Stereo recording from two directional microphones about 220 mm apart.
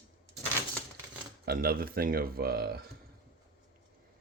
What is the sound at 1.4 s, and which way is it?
Speech, 45° right (ahead or behind).